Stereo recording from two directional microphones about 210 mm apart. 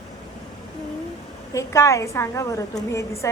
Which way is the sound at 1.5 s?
15° left (ahead or behind).